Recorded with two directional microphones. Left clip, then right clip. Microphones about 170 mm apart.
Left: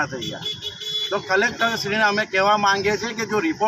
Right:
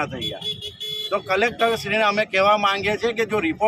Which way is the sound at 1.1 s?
40° right (ahead or behind).